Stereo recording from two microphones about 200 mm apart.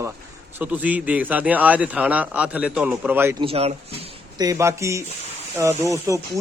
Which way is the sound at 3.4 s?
30° right (ahead or behind).